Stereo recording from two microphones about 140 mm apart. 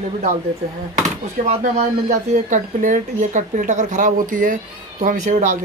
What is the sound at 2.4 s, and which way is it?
Speech, 65° right (ahead or behind).